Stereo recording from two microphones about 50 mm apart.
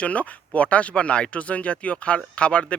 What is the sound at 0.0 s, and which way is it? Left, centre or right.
Speech, left.